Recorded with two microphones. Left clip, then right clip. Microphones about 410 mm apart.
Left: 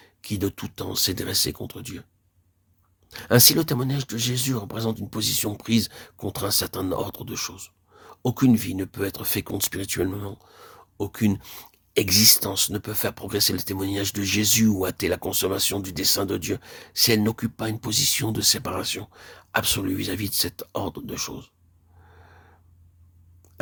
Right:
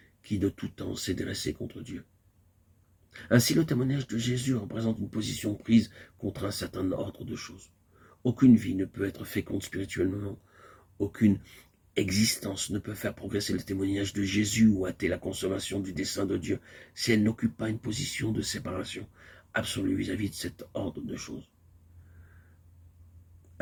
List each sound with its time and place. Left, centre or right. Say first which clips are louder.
0.2 s speech: left 3 dB; left
3.1 s speech: left 8 dB; left
8.7 s speech: left 3 dB; left